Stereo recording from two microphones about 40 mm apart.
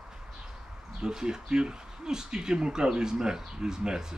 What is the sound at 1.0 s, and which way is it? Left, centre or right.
Speech, centre.